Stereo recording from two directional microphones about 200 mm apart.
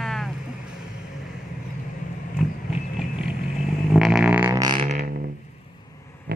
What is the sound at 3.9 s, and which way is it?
Music, 5° right (ahead or behind).